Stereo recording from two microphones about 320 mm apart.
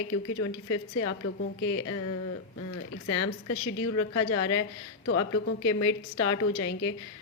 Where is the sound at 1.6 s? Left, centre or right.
Left.